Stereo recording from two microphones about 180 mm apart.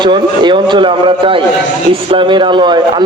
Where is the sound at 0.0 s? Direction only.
25° right (ahead or behind).